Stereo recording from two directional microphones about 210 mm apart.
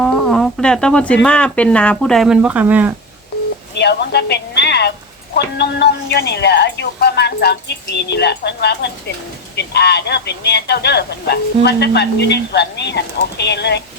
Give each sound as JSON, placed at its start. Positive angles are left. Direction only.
{"t": 0.0, "sound": "speech", "side_deg": 0}
{"t": 3.8, "sound": "a woman's voice", "side_deg": 55}